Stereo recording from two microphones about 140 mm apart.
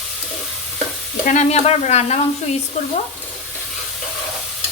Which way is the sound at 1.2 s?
55° left (ahead or behind).